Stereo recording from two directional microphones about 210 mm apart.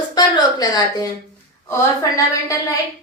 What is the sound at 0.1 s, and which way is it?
A woman's voice, 20° left (ahead or behind).